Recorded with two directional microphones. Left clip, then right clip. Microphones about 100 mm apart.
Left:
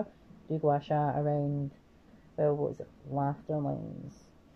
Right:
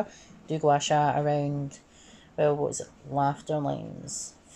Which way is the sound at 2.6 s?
35° right (ahead or behind).